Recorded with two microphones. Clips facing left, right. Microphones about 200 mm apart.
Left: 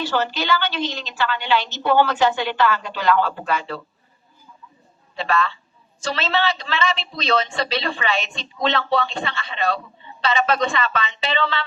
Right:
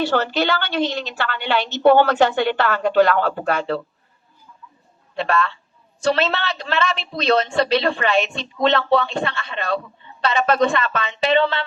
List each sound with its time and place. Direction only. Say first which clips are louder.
0.0 s a woman's voice: right 4 dB; 60° right (ahead or behind)
5.1 s a woman's voice: right 1 dB; 55° right (ahead or behind)